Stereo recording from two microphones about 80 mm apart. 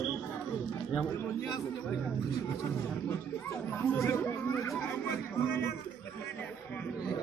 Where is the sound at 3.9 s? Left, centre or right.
Left.